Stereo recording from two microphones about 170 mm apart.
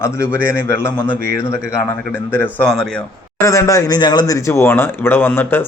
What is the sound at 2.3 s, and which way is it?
Speech, 10° left (ahead or behind).